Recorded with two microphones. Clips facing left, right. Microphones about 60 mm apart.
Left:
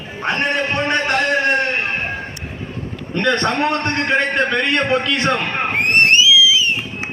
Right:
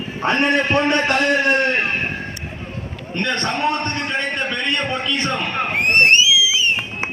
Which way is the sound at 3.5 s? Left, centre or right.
Left.